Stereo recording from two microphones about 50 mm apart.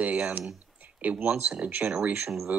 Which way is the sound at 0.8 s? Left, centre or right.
Right.